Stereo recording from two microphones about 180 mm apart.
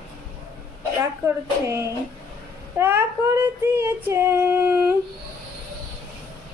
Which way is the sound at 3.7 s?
15° right (ahead or behind).